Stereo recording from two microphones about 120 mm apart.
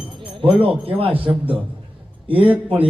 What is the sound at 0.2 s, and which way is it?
Speech, 45° right (ahead or behind).